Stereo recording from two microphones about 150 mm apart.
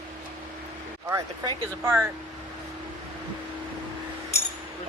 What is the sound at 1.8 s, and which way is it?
Speech, 15° right (ahead or behind).